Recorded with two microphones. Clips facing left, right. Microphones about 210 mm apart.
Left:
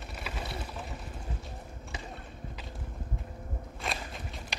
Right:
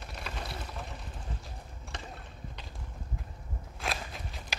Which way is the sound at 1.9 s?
5° left (ahead or behind).